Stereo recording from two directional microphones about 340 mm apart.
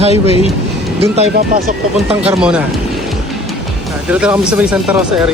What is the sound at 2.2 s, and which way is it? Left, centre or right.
Music, centre.